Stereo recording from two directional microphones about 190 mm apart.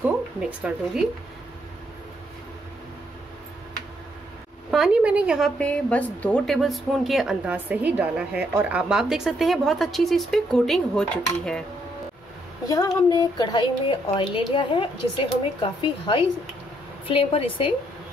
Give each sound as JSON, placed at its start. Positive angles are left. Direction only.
{"t": 0.0, "sound": "speech", "side_deg": -5}
{"t": 4.6, "sound": "a woman's voice", "side_deg": -5}
{"t": 5.6, "sound": "a woman's voice", "side_deg": 5}
{"t": 12.6, "sound": "a woman's voice", "side_deg": 15}